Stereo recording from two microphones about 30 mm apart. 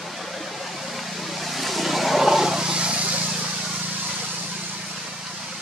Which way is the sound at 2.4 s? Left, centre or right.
Right.